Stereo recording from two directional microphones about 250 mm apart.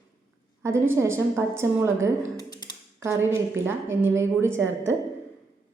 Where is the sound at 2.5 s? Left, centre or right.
Centre.